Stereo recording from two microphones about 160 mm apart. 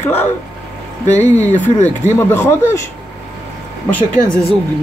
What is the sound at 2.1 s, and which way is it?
Speech, 15° left (ahead or behind).